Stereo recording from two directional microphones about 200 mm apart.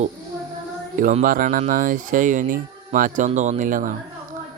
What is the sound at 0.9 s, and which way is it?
Speech, 40° right (ahead or behind).